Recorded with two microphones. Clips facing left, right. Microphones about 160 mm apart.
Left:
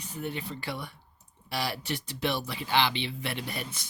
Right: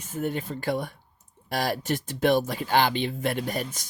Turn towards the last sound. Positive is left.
turn(degrees=-45)  # may be behind; listen again after turning